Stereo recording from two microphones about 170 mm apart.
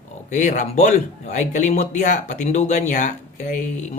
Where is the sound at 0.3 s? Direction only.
45° left (ahead or behind).